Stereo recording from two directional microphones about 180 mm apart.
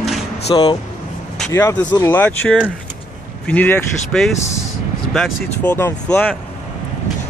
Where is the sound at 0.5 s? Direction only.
25° left (ahead or behind).